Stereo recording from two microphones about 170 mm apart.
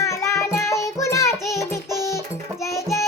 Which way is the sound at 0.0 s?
15° left (ahead or behind).